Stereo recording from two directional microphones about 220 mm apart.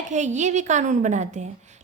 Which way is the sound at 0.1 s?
35° right (ahead or behind).